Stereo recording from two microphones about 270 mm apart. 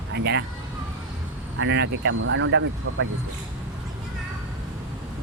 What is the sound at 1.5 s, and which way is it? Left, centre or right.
Speech, right.